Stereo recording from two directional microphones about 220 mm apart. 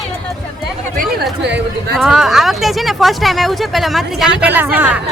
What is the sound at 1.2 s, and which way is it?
Speech, 50° right (ahead or behind).